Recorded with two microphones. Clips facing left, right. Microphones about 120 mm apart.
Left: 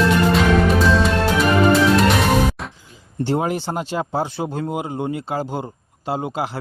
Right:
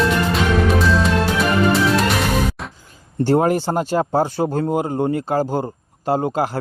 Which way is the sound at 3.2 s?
45° right (ahead or behind).